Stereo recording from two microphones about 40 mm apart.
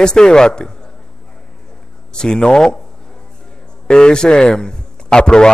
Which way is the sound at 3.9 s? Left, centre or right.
Left.